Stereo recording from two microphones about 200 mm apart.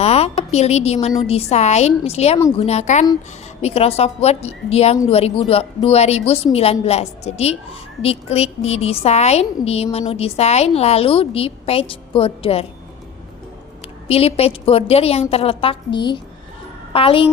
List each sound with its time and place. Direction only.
0.0 s a woman's voice: 30° left (ahead or behind)
14.1 s a woman's voice: 30° left (ahead or behind)